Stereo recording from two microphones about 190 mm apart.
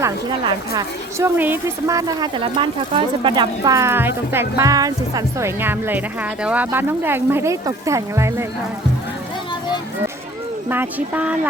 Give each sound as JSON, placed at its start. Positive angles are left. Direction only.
{"t": 0.0, "sound": "a woman's voice", "side_deg": -20}
{"t": 10.7, "sound": "a woman's voice", "side_deg": -10}